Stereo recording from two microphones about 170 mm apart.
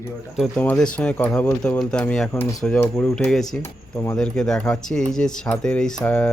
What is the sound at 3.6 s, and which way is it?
Speech, 15° left (ahead or behind).